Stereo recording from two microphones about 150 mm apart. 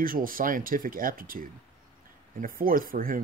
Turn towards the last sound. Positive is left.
turn(degrees=-70)  # may be behind; listen again after turning